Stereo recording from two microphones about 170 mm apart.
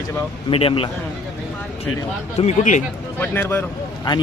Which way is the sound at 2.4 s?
45° left (ahead or behind).